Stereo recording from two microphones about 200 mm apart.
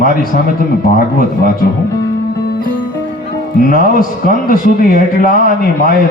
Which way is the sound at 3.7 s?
45° left (ahead or behind).